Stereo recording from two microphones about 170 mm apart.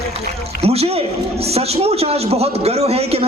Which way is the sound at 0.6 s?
35° right (ahead or behind).